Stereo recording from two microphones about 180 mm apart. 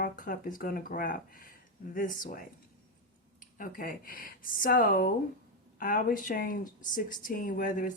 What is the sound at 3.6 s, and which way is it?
Speech, 50° left (ahead or behind).